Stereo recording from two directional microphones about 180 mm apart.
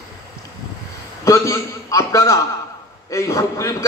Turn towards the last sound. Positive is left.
turn(degrees=20)  # may be behind; listen again after turning